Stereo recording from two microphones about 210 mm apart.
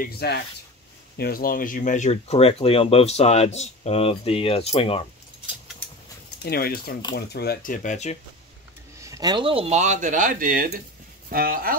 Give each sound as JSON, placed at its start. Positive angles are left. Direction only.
{"t": 0.0, "sound": "speech", "side_deg": 50}
{"t": 6.4, "sound": "speech", "side_deg": 45}
{"t": 9.0, "sound": "speech", "side_deg": -15}